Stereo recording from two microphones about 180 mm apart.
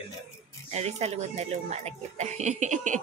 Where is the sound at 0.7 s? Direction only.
35° right (ahead or behind).